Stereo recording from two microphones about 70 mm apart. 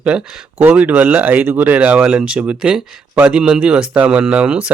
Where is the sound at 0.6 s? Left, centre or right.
Right.